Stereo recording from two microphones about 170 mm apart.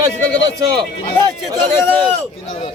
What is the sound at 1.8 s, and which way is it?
Speech, 10° left (ahead or behind).